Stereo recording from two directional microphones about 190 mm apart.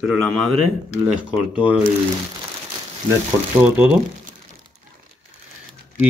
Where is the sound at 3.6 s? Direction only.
5° right (ahead or behind).